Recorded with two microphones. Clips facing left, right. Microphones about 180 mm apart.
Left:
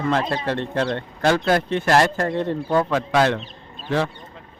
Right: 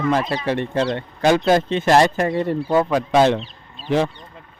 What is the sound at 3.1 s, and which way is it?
A man's voice, 20° right (ahead or behind).